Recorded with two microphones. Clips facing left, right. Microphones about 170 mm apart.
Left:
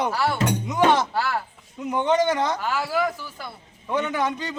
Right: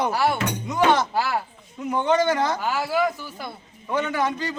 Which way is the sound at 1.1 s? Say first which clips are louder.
Right 1 dB; 10° right (ahead or behind).